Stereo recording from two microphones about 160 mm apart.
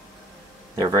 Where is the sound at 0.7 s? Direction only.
25° right (ahead or behind).